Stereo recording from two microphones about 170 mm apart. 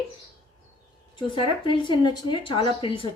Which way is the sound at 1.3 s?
30° left (ahead or behind).